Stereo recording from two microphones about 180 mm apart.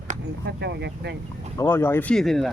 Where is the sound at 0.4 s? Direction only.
70° right (ahead or behind).